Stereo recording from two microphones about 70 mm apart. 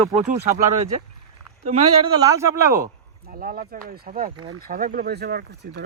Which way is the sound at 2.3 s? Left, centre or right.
Right.